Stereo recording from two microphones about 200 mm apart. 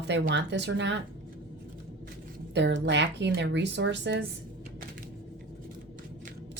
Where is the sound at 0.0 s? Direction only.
60° right (ahead or behind).